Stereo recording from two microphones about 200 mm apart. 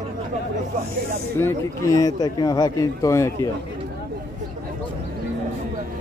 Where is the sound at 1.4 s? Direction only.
15° left (ahead or behind).